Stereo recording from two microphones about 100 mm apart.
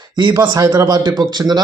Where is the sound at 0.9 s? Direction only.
45° right (ahead or behind).